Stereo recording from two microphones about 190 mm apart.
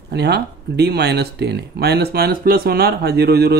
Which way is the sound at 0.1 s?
60° right (ahead or behind).